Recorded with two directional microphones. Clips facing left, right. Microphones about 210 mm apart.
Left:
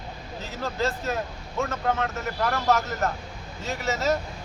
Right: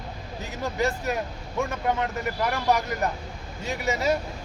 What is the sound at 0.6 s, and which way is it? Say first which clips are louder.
A man's voice: right 1 dB; 15° right (ahead or behind).